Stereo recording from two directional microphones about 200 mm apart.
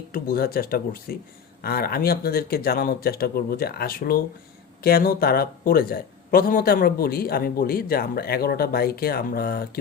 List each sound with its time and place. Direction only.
0.1 s speech: 50° left (ahead or behind)